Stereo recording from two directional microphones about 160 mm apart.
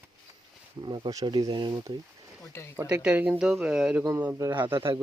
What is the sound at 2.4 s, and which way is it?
Speech, 15° left (ahead or behind).